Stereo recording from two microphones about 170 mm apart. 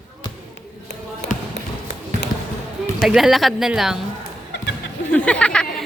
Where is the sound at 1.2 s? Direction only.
80° left.